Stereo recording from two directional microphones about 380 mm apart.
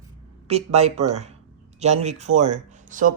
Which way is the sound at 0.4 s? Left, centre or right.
Centre.